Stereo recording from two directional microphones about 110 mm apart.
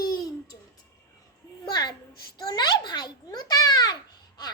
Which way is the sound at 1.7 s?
40° left (ahead or behind).